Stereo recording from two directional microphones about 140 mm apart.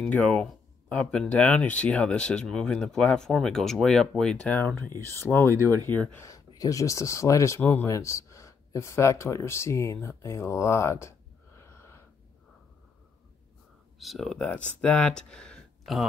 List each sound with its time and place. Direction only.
0.0 s speech: 10° left (ahead or behind)
13.9 s speech: centre (ahead or behind)